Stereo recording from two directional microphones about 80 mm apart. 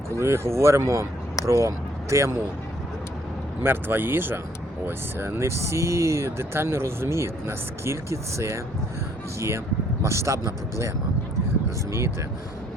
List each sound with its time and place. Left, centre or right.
0.2 s speech: right
3.6 s speech: right
10.0 s speech: right